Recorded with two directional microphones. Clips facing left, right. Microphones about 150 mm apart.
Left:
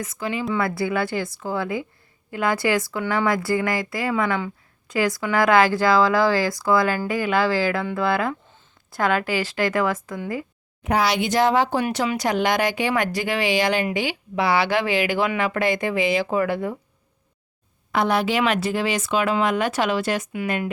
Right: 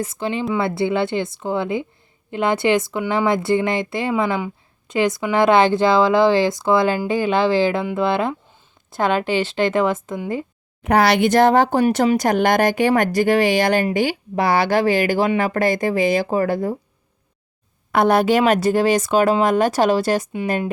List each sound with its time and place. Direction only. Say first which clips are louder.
0.0 s speech: right 4 dB; 30° right (ahead or behind)
10.8 s speech: right 6 dB; 60° right (ahead or behind); by 16.7 s 35° right (ahead or behind)
17.9 s speech: right 6 dB; 50° right (ahead or behind); by 20.7 s 30° right (ahead or behind)